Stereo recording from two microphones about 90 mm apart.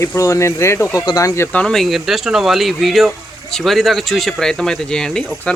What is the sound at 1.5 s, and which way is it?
Speech, 15° left (ahead or behind).